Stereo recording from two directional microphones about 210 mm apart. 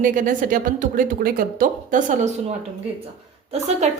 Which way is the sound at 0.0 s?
40° right (ahead or behind).